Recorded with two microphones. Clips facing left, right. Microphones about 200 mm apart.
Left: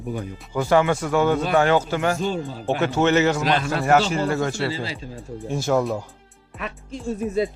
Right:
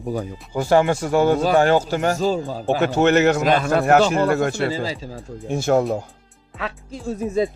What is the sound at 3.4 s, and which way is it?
Speech, 50° right (ahead or behind).